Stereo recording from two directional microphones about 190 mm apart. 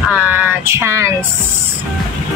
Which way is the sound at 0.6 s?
15° right (ahead or behind).